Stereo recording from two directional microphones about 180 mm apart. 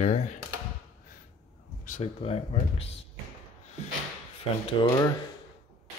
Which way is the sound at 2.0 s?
35° left (ahead or behind).